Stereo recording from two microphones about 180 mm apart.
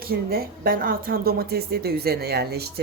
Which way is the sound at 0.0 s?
55° right (ahead or behind).